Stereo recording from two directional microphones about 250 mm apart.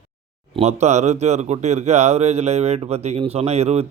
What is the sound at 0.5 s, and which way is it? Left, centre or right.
Speech, right.